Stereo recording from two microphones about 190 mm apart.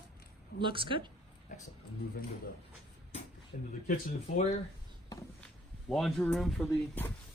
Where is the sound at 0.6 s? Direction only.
25° right (ahead or behind).